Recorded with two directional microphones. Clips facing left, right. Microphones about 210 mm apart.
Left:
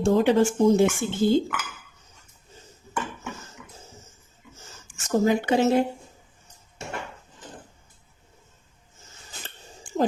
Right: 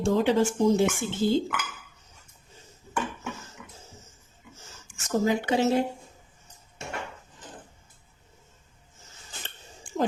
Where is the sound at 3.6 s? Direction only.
5° right (ahead or behind).